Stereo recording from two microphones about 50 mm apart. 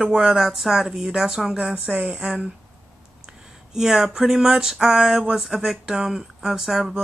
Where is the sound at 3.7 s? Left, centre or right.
Centre.